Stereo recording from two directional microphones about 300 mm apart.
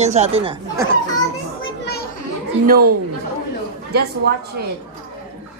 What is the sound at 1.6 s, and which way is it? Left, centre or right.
Children playing, left.